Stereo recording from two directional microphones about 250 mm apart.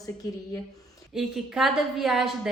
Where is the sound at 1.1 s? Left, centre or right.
Centre.